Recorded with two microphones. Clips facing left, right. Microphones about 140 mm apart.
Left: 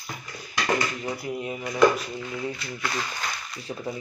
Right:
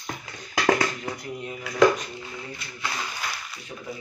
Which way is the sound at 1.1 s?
10° left (ahead or behind).